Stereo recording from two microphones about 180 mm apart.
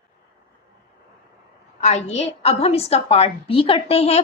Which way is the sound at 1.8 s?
40° left (ahead or behind).